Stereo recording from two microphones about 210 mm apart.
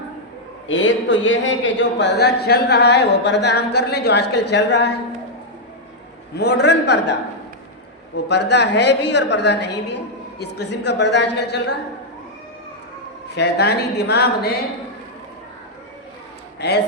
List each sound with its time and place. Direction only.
0.7 s a man's voice: 60° left (ahead or behind)
6.3 s a woman's voice: 50° left (ahead or behind)
13.3 s a woman's voice: 50° left (ahead or behind)
16.6 s a man's voice: 50° left (ahead or behind)